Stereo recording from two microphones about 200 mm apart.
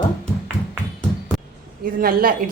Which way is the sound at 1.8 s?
45° right (ahead or behind).